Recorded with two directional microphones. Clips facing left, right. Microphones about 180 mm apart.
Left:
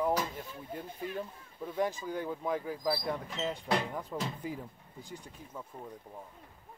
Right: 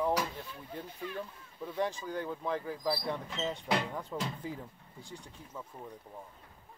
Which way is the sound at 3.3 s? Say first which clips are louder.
Even; centre (ahead or behind).